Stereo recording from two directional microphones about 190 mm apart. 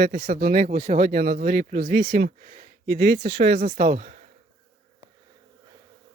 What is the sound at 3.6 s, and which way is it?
Speech, 35° right (ahead or behind).